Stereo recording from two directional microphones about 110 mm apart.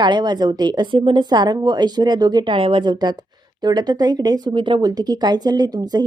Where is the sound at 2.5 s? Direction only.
55° right (ahead or behind).